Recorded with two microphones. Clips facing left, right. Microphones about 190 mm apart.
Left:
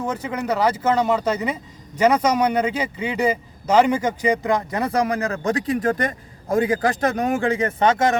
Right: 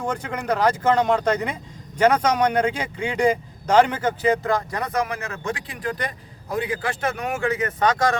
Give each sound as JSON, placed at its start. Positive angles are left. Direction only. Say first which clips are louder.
{"t": 0.1, "sound": "speech", "louder": "left 1 dB", "side_deg": 5}